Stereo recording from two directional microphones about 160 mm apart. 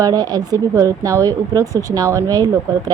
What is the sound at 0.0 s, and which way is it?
A woman's voice, 25° right (ahead or behind).